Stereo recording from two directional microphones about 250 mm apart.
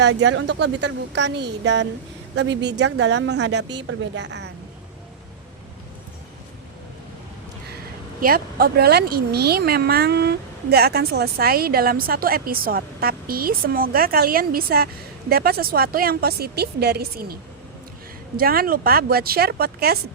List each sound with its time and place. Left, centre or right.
0.2 s speech: right
8.2 s speech: right
18.3 s speech: right